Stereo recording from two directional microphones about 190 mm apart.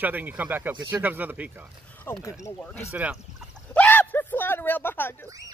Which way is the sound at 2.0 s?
10° left (ahead or behind).